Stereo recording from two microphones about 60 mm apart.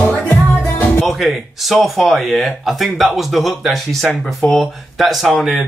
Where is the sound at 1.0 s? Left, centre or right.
Centre.